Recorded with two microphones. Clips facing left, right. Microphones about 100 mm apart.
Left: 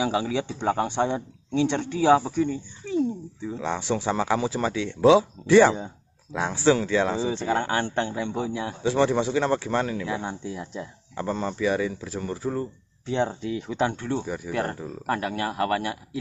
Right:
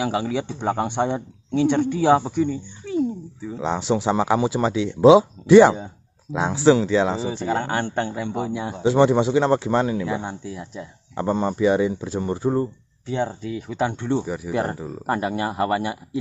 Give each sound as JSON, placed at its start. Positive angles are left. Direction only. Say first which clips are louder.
{"t": 0.0, "sound": "speech", "louder": "right 1 dB", "side_deg": -5}
{"t": 2.5, "sound": "a sound", "louder": "right 2 dB", "side_deg": 0}
{"t": 3.6, "sound": "speech", "louder": "right 5 dB", "side_deg": -15}
{"t": 8.9, "sound": "speech", "louder": "right 5 dB", "side_deg": -25}
{"t": 10.5, "sound": "speech", "louder": "even", "side_deg": 0}
{"t": 11.1, "sound": "speech", "louder": "right 6 dB", "side_deg": -25}
{"t": 13.1, "sound": "speech", "louder": "even", "side_deg": -5}